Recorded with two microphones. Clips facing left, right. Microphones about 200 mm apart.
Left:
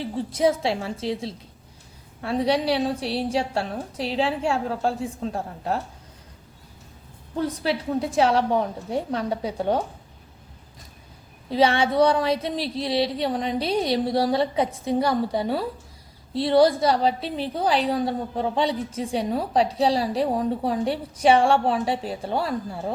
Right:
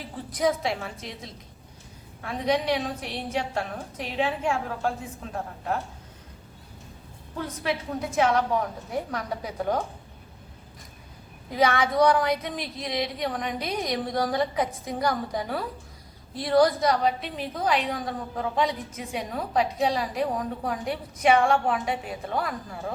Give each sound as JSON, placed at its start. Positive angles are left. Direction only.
{"t": 0.0, "sound": "a woman's voice", "side_deg": 25}
{"t": 7.3, "sound": "speech", "side_deg": 30}
{"t": 11.4, "sound": "a woman's voice", "side_deg": 30}